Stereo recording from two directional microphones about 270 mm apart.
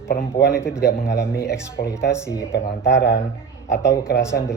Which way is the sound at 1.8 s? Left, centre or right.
Left.